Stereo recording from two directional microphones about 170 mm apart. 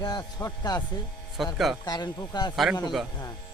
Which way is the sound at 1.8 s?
20° left (ahead or behind).